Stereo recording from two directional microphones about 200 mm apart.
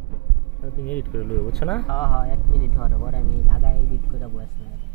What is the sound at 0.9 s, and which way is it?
Speech, 10° left (ahead or behind).